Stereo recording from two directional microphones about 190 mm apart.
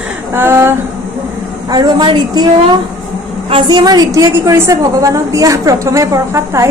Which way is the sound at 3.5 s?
25° right (ahead or behind).